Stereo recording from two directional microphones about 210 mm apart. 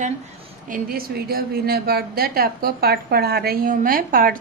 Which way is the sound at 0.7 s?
40° right (ahead or behind).